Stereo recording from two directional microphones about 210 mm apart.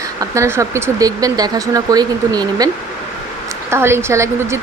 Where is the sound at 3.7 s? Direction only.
10° right (ahead or behind).